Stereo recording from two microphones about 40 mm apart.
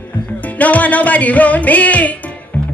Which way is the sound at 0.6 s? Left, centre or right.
Left.